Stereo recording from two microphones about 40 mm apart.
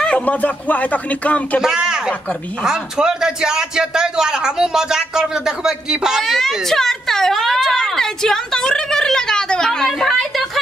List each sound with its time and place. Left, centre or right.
0.2 s speech: left
1.6 s a man's voice: centre
6.2 s speech: centre
9.8 s speech: centre